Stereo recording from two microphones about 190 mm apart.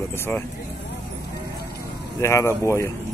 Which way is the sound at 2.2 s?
15° left (ahead or behind).